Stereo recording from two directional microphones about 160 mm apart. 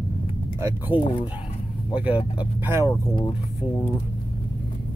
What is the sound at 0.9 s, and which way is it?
Speech, 35° left (ahead or behind).